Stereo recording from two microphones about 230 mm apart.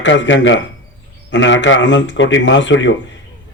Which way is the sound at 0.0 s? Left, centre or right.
Left.